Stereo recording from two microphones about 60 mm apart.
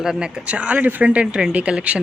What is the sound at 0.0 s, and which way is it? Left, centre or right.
Speech, centre.